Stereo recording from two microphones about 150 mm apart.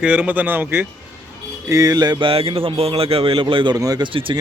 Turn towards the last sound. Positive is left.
turn(degrees=-35)  # may be behind; listen again after turning